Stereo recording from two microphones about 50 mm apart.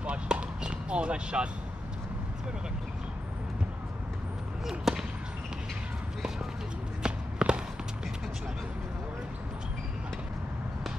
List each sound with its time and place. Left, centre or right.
0.0 s basketball bounce: right
4.6 s speech: centre
7.0 s walk: centre